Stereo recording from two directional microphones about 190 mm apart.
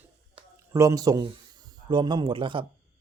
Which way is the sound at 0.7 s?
15° right (ahead or behind).